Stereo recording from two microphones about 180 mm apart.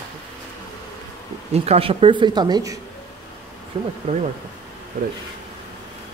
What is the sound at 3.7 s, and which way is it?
Speech, 30° right (ahead or behind).